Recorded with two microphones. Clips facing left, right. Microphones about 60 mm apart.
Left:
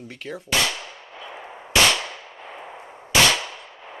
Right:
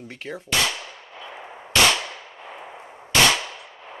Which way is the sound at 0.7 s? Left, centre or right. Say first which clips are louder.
Even; centre.